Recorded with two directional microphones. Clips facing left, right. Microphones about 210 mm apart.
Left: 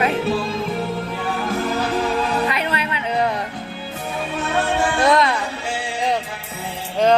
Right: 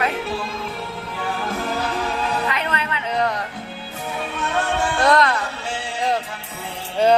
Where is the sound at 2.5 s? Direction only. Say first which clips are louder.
Left 2 dB; 10° left (ahead or behind).